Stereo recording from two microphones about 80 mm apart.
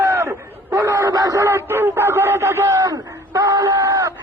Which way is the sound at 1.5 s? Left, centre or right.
Right.